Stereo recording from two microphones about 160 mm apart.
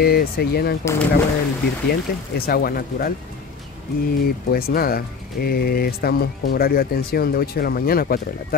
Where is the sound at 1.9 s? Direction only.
70° left (ahead or behind).